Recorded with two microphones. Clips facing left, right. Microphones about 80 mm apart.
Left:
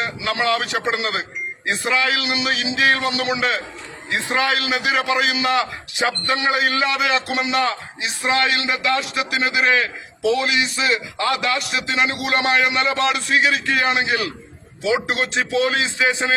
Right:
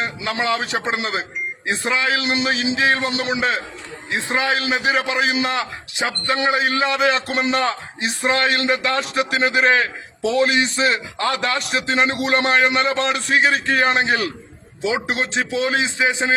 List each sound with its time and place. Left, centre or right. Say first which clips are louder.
0.0 s a man's voice: left 1 dB; right
14.8 s a man's voice: left 1 dB; right